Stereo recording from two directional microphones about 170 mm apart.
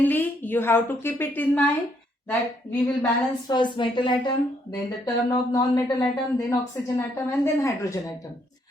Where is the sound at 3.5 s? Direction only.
25° left (ahead or behind).